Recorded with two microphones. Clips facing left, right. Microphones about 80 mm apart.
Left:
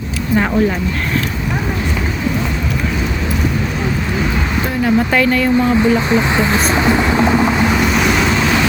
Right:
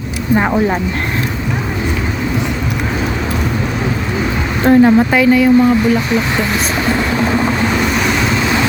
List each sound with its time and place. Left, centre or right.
0.3 s speech: centre
4.6 s speech: right
4.9 s speech: centre
6.1 s speech: left
7.3 s waves: centre